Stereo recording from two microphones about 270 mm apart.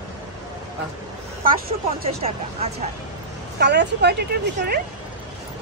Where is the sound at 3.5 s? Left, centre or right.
Right.